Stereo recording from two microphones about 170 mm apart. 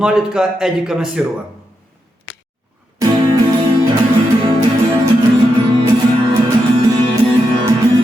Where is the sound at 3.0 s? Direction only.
20° right (ahead or behind).